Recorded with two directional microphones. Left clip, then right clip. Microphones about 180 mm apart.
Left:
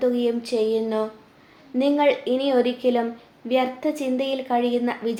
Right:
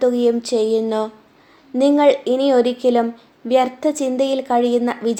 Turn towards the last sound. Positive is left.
turn(degrees=-45)  # may be behind; listen again after turning